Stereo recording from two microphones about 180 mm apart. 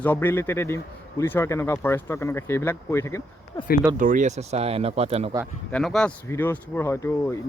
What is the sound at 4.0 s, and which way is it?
Speech, 45° right (ahead or behind).